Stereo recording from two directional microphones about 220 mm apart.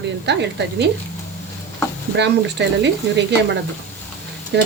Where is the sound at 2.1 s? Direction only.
50° right (ahead or behind).